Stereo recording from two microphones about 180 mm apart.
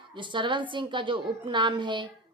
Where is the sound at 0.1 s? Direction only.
25° right (ahead or behind).